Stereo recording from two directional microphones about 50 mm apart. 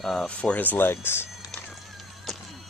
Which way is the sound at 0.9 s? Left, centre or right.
Left.